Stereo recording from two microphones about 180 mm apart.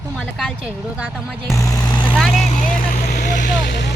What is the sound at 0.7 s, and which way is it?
Speech, 5° right (ahead or behind).